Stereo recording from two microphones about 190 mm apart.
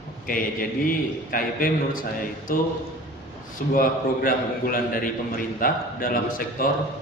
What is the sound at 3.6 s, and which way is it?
A man's voice, 45° left (ahead or behind).